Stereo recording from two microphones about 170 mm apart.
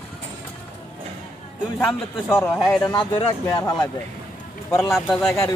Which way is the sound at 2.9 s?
25° left (ahead or behind).